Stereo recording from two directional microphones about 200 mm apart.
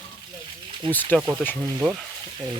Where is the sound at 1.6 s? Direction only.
15° right (ahead or behind).